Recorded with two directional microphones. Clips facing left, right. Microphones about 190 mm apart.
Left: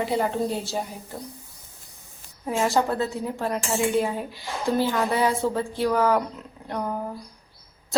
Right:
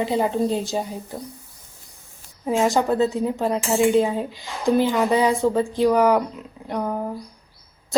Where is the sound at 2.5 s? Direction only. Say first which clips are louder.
Right 4 dB; 15° right (ahead or behind).